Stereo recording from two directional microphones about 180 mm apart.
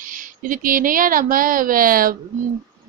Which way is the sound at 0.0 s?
45° right (ahead or behind).